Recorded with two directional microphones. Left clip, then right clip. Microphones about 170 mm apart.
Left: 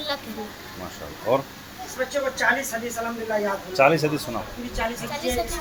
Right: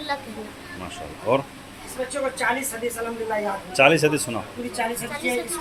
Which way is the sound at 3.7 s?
20° right (ahead or behind).